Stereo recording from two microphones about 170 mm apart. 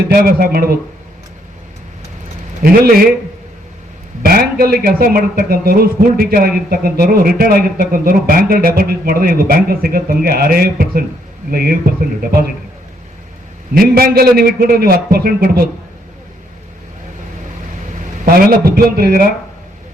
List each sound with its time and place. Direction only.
0.1 s a man's voice: 60° right (ahead or behind)
2.6 s a man's voice: 55° right (ahead or behind)
4.2 s a man's voice: 60° right (ahead or behind)
13.7 s a man's voice: 60° right (ahead or behind)
18.3 s a man's voice: 60° right (ahead or behind)